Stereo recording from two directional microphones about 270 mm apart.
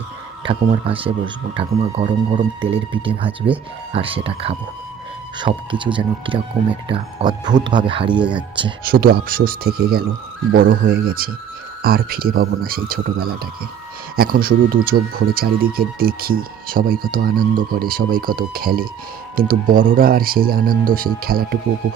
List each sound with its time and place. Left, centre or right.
0.4 s speech: centre
8.2 s speech: centre
8.8 s speech: right